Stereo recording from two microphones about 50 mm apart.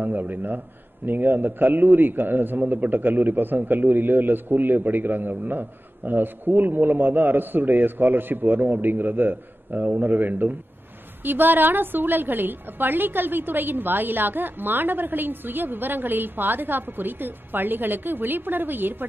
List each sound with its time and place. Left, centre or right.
0.0 s a man's voice: right